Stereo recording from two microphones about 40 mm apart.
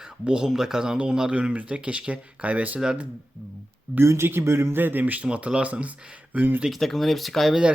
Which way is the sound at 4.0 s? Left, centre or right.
Right.